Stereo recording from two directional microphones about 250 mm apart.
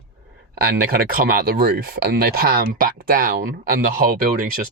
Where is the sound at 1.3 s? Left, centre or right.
Right.